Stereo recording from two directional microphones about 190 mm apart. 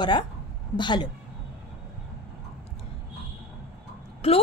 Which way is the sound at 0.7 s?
25° left (ahead or behind).